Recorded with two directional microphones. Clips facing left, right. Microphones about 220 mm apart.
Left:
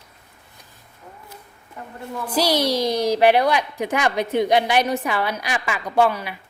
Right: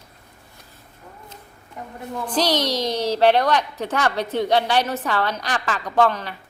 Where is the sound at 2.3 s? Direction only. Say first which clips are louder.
Left 2 dB; 10° left (ahead or behind).